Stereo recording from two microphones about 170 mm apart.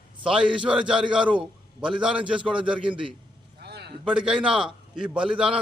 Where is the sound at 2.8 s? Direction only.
30° right (ahead or behind).